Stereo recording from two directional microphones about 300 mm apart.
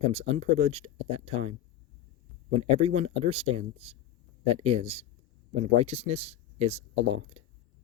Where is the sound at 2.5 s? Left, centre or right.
Centre.